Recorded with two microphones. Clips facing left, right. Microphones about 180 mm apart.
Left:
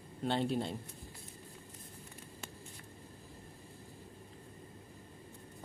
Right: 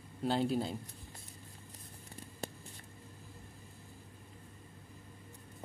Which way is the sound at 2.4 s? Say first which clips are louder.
Right 8 dB; 35° right (ahead or behind).